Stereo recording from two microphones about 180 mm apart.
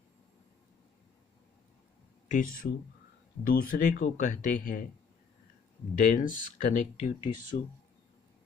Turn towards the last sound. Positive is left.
turn(degrees=40)  # may be behind; listen again after turning